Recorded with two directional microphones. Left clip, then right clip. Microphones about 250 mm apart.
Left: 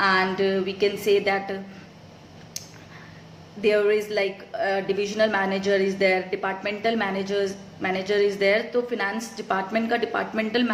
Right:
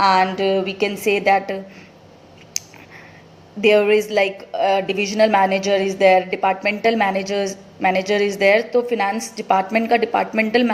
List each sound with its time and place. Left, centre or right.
0.0 s a woman's voice: right
3.6 s a woman's voice: right